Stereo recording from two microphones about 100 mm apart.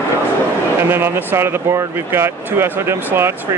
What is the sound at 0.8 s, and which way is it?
Speech, 25° right (ahead or behind).